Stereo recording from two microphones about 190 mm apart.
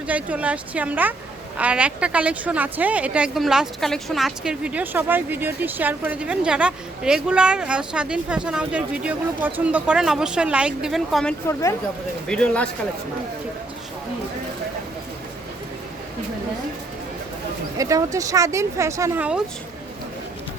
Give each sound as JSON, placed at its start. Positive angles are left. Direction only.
{"t": 0.1, "sound": "a woman's voice", "side_deg": -5}
{"t": 17.7, "sound": "speech", "side_deg": -15}